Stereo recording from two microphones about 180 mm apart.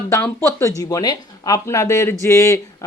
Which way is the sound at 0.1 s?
15° left (ahead or behind).